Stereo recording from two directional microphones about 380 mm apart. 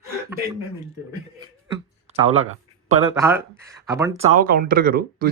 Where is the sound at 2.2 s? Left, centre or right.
Centre.